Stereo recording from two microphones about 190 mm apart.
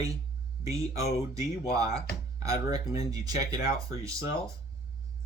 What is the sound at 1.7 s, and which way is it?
Speech, 20° right (ahead or behind).